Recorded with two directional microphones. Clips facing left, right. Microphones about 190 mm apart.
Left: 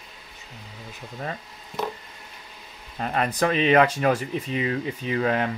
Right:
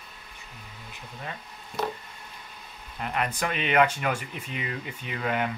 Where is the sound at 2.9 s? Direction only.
35° left (ahead or behind).